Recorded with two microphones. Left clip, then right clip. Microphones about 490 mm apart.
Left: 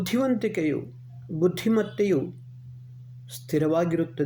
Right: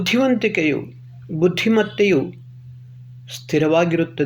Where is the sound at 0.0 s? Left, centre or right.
Left.